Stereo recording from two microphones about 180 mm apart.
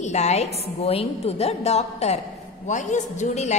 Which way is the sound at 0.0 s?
40° left (ahead or behind).